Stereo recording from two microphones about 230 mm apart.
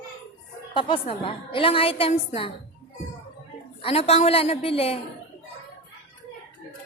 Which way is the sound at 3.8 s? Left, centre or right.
Left.